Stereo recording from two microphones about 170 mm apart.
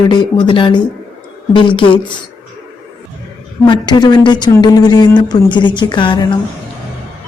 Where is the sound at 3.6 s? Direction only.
25° left (ahead or behind).